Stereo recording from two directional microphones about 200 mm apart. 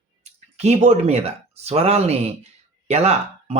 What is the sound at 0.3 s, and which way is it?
Speech, 35° right (ahead or behind).